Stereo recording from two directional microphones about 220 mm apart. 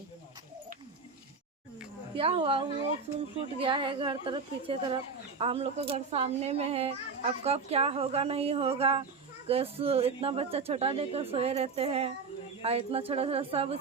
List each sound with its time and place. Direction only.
2.1 s speech: 25° right (ahead or behind)